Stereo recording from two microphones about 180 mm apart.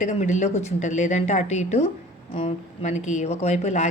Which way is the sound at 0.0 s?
40° left (ahead or behind).